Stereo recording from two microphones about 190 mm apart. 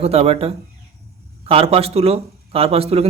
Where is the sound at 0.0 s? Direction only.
30° right (ahead or behind).